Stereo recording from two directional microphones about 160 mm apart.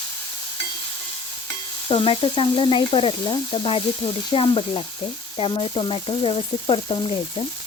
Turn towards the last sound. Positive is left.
turn(degrees=30)  # may be behind; listen again after turning